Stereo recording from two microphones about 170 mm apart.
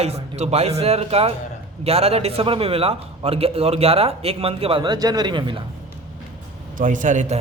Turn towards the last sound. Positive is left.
turn(degrees=-50)  # may be behind; listen again after turning